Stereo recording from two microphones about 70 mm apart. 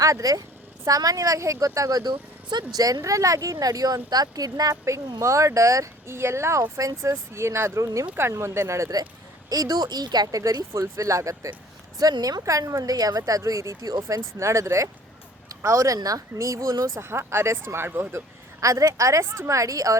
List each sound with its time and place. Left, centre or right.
0.0 s speech: right
5.2 s speech: right
9.5 s speech: right
11.9 s speech: right
12.4 s speech: right
17.0 s speech: right
18.6 s speech: right